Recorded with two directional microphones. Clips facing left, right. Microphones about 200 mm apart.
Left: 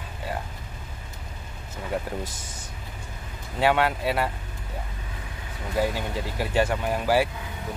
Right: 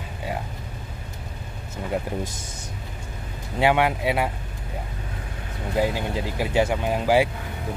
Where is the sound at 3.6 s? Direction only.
15° right (ahead or behind).